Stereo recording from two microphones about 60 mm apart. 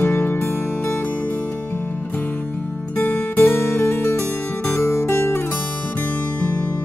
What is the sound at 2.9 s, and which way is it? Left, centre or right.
Music, left.